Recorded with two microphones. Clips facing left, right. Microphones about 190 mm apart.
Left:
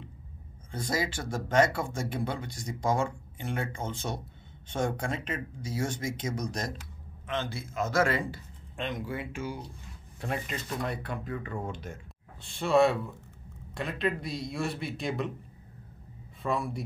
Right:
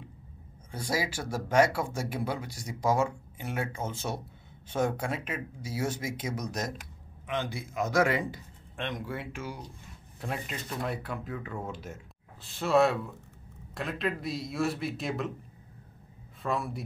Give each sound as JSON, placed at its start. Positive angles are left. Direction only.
{"t": 0.7, "sound": "speech", "side_deg": -10}
{"t": 8.7, "sound": "speech", "side_deg": 0}
{"t": 16.4, "sound": "speech", "side_deg": 0}